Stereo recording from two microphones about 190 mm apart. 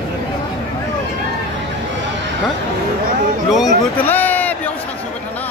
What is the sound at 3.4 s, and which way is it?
Speech, centre (ahead or behind).